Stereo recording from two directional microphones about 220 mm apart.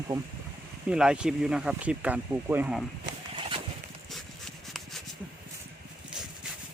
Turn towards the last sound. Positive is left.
turn(degrees=0)  # may be behind; listen again after turning